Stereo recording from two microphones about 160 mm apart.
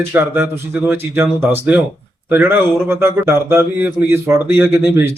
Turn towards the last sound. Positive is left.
turn(degrees=-15)  # may be behind; listen again after turning